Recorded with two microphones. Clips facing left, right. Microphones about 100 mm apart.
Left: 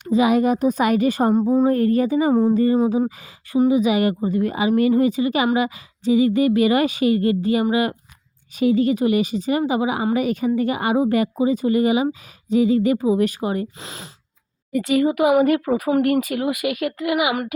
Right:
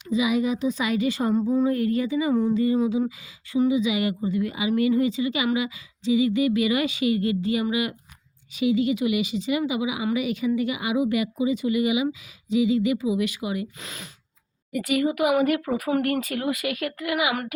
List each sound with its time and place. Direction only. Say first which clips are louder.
0.0 s a woman's voice: left 6 dB; 50° left (ahead or behind)
13.7 s speech: left 3 dB; 30° left (ahead or behind)